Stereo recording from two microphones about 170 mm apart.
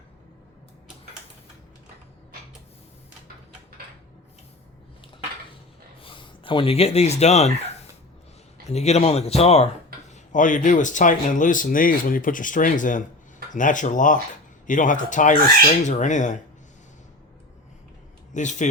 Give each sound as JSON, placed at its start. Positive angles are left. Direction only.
{"t": 6.0, "sound": "speech", "side_deg": 30}
{"t": 8.7, "sound": "speech", "side_deg": 40}
{"t": 10.3, "sound": "speech", "side_deg": 50}
{"t": 18.3, "sound": "speech", "side_deg": 45}